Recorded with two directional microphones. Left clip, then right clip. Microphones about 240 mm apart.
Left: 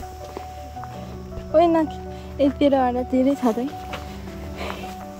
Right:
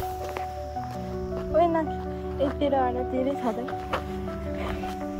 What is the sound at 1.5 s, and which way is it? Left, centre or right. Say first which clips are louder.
Music: left 6 dB; left.